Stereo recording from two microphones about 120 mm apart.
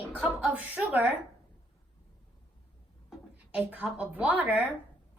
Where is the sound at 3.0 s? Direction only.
10° right (ahead or behind).